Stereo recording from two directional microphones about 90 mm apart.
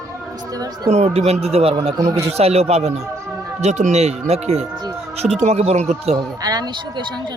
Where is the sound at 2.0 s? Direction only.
35° right (ahead or behind).